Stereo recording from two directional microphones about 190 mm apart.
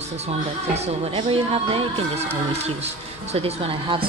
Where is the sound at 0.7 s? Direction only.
30° right (ahead or behind).